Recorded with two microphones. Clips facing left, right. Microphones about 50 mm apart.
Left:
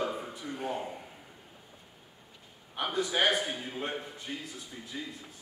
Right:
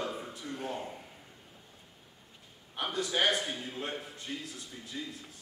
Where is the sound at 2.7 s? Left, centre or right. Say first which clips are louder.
Left 2 dB; centre.